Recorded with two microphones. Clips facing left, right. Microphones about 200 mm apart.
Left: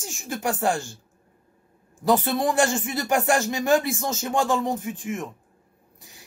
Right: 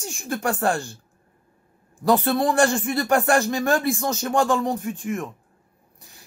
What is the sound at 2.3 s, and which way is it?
Speech, 20° left (ahead or behind).